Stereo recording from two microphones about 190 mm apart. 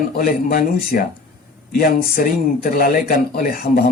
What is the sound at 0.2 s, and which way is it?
Speech, 50° left (ahead or behind).